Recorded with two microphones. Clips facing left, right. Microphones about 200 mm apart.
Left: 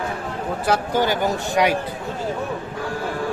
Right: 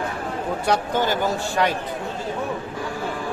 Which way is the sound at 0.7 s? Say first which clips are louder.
Left 2 dB; 10° left (ahead or behind).